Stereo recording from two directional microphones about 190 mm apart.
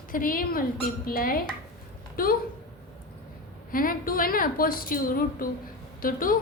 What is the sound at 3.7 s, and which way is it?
A woman's voice, 50° left (ahead or behind).